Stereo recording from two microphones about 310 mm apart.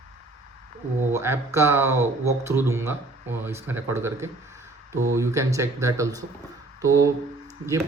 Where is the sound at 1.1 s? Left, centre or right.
Centre.